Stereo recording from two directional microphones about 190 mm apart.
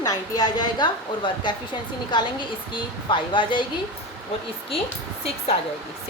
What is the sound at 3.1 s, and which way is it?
Speech, 25° left (ahead or behind).